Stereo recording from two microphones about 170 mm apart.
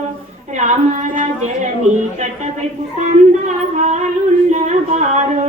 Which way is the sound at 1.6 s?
45° right (ahead or behind).